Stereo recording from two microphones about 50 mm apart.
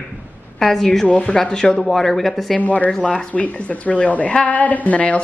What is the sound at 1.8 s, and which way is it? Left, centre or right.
Speech, centre.